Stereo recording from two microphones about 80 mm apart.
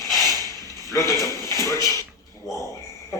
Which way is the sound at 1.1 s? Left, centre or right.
Left.